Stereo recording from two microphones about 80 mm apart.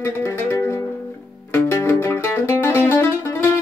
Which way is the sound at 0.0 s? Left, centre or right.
Left.